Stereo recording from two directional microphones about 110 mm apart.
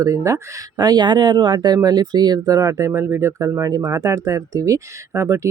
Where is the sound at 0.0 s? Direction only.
30° right (ahead or behind).